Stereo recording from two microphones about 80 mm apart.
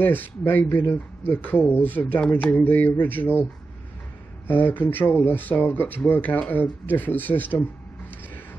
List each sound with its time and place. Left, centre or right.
0.0 s speech: left
4.5 s speech: left